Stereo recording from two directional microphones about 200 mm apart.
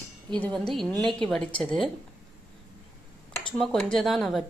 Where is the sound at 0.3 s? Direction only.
5° left (ahead or behind).